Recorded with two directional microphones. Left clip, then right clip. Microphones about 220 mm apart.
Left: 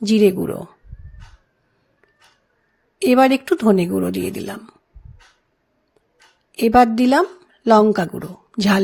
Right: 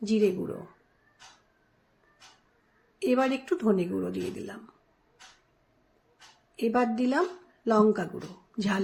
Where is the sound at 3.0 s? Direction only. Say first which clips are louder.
Left 12 dB; 45° left (ahead or behind).